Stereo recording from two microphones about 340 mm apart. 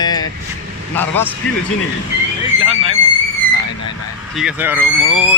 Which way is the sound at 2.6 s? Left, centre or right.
Centre.